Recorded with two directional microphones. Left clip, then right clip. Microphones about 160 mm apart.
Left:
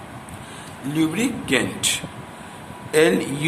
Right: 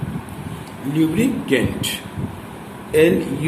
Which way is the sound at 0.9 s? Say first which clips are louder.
Right 3 dB; 40° left (ahead or behind).